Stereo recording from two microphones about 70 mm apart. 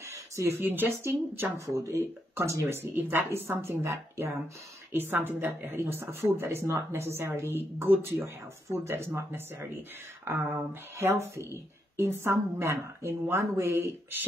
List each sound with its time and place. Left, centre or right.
0.0 s speech: right
1.7 s speech: right
2.9 s speech: right